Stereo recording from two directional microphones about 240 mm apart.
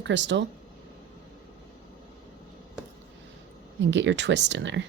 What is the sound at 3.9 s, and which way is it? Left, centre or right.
Speech, right.